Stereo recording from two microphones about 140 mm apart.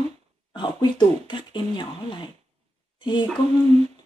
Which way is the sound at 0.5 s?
35° left (ahead or behind).